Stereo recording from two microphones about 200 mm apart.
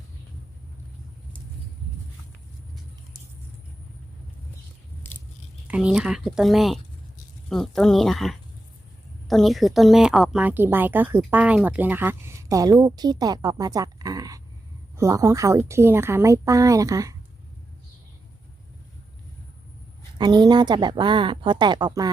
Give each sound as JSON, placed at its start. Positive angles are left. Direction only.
{"t": 5.0, "sound": "biting", "side_deg": 10}
{"t": 5.6, "sound": "a woman's voice", "side_deg": -5}
{"t": 20.1, "sound": "speech", "side_deg": -20}